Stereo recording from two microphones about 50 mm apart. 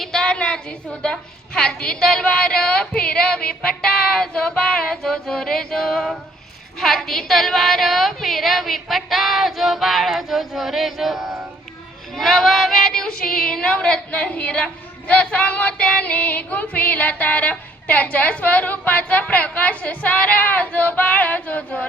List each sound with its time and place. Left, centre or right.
0.0 s a woman's voice: centre; by 21.8 s left